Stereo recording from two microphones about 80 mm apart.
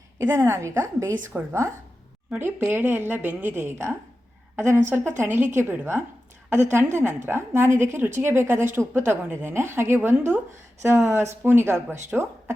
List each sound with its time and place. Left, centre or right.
0.2 s speech: right
2.4 s a woman's voice: right